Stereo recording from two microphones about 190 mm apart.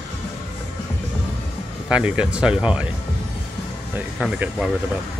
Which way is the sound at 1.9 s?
5° right (ahead or behind).